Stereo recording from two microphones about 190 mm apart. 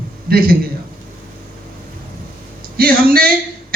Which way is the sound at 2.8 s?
50° right (ahead or behind).